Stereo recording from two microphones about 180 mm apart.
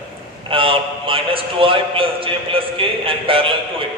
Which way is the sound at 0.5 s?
30° right (ahead or behind).